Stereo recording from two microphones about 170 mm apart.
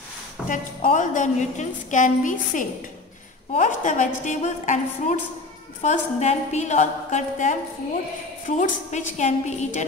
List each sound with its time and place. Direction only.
0.5 s a woman's voice: 50° left (ahead or behind)